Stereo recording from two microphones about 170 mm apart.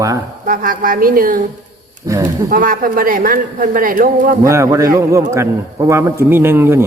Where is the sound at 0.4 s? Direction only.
55° right (ahead or behind).